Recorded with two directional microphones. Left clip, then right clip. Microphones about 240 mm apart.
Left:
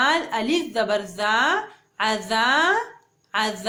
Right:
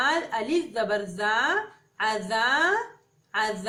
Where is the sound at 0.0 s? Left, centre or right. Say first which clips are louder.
Left 4 dB; left.